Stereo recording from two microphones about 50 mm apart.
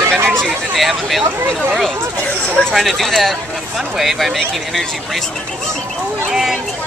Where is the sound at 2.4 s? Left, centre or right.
Left.